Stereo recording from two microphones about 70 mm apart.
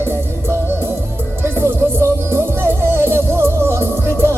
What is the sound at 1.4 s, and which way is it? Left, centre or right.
Music, right.